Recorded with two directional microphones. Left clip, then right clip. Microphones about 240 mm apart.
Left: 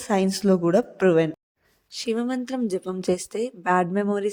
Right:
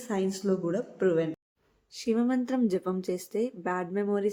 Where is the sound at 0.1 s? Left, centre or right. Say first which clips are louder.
Left 8 dB; left.